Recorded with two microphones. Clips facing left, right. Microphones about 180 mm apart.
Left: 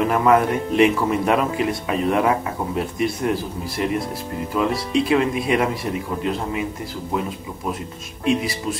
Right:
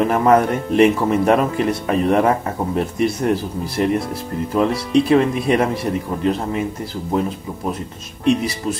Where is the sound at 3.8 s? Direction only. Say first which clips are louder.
Right 5 dB; 45° right (ahead or behind).